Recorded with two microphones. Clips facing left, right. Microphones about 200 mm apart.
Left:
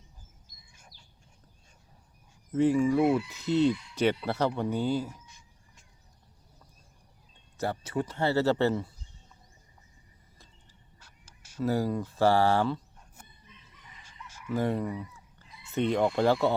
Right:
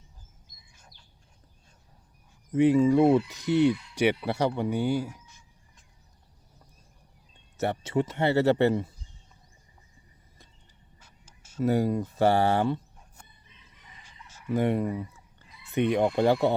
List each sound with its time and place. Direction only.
2.5 s speech: 20° right (ahead or behind)
3.2 s speech: 15° right (ahead or behind)
7.6 s speech: 25° right (ahead or behind)
11.3 s speech: 20° right (ahead or behind)
14.5 s speech: 20° right (ahead or behind)